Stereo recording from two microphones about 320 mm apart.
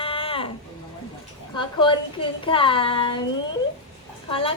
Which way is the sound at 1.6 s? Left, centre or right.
Centre.